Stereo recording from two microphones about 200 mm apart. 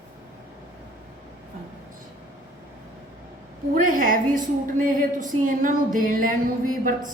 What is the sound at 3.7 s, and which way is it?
A woman's voice, 40° right (ahead or behind).